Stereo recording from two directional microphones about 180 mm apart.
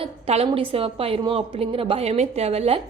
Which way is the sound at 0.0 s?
35° right (ahead or behind).